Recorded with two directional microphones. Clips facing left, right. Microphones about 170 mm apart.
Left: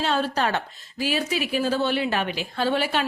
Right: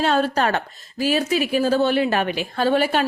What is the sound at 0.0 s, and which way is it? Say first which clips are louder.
A woman's voice: right 4 dB; 50° right (ahead or behind).